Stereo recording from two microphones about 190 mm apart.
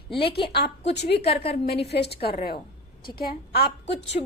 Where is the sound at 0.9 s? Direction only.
60° left (ahead or behind).